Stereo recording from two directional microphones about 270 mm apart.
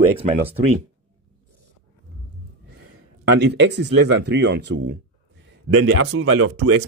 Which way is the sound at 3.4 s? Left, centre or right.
Right.